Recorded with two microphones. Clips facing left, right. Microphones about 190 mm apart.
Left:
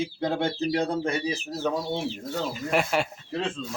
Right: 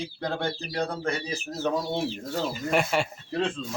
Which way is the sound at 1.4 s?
5° right (ahead or behind).